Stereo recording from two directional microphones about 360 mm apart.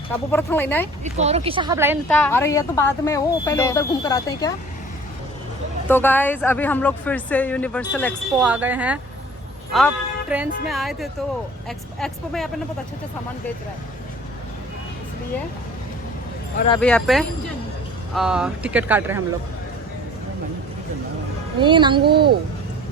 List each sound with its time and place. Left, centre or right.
0.1 s speech: centre
1.1 s speech: centre
2.0 s speech: centre
5.9 s speech: centre
16.7 s speech: centre
21.6 s speech: centre
22.0 s a woman's voice: right